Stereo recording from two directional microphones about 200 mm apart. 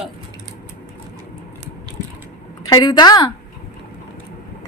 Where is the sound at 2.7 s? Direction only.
20° left (ahead or behind).